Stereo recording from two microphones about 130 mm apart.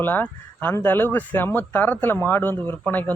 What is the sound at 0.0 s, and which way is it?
Speech, 15° left (ahead or behind).